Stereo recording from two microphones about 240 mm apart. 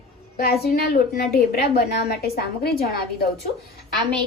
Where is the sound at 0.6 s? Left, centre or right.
Left.